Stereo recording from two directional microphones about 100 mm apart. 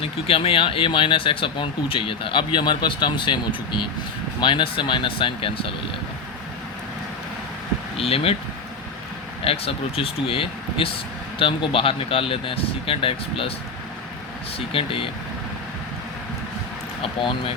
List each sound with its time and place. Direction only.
0.0 s speech: 70° left (ahead or behind)
7.9 s speech: 75° left (ahead or behind)
9.4 s speech: 75° left (ahead or behind)
14.7 s speech: 65° left (ahead or behind)
17.0 s speech: 65° left (ahead or behind)